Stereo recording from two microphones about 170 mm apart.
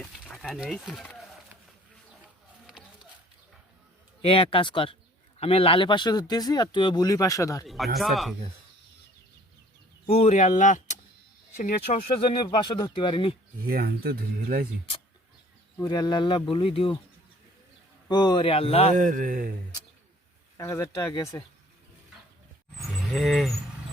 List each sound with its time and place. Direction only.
0.0 s speech: centre (ahead or behind)
2.6 s a sound: 5° right (ahead or behind)
4.2 s a man's voice: 30° left (ahead or behind)
7.6 s speech: centre (ahead or behind)
10.1 s speech: 40° left (ahead or behind)
12.0 s speech: 30° left (ahead or behind)
13.6 s speech: 60° right (ahead or behind)
15.8 s speech: 25° left (ahead or behind)
18.1 s a man's voice: 25° left (ahead or behind)
18.9 s speech: 50° right (ahead or behind)
20.6 s speech: 15° left (ahead or behind)
23.1 s speech: centre (ahead or behind)